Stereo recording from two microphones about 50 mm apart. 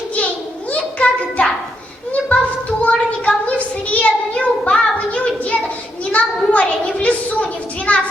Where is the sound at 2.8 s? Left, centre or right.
Left.